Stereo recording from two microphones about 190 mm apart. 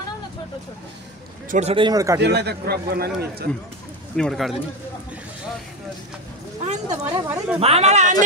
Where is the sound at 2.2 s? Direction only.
60° right (ahead or behind).